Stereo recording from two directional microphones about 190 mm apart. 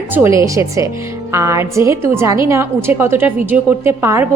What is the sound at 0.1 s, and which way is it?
A woman's voice, 15° right (ahead or behind).